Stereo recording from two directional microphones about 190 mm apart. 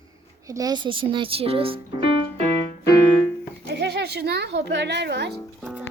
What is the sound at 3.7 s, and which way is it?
Speech, 60° right (ahead or behind).